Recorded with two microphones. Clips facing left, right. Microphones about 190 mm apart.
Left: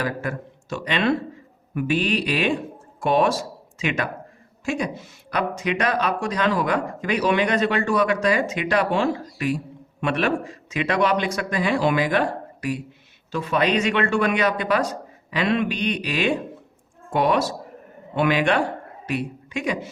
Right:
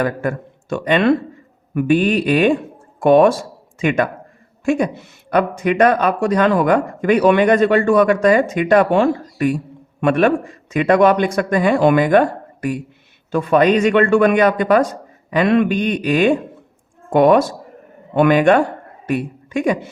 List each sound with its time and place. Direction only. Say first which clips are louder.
0.0 s a man's voice: right 7 dB; 55° right (ahead or behind)